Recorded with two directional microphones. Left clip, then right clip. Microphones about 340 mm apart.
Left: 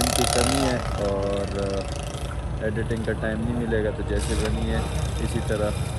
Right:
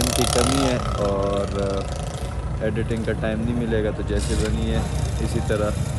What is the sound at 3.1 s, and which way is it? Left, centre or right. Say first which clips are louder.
Speech: right 3 dB; centre.